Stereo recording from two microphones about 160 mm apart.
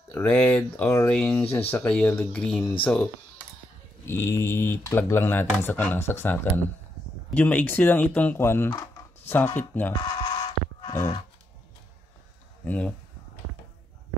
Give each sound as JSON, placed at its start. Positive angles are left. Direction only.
{"t": 0.1, "sound": "speech", "side_deg": 5}
{"t": 10.2, "sound": "a sound", "side_deg": 30}
{"t": 12.6, "sound": "speech", "side_deg": 10}